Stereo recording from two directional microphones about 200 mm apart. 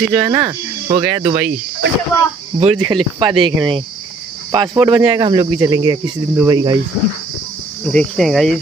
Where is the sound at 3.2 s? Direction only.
25° right (ahead or behind).